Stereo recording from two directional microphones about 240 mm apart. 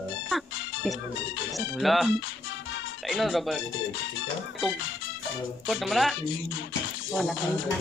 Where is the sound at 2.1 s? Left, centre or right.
Left.